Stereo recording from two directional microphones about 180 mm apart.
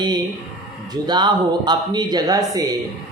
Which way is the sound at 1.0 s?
25° right (ahead or behind).